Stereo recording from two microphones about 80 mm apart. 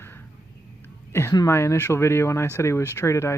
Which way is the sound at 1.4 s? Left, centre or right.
Left.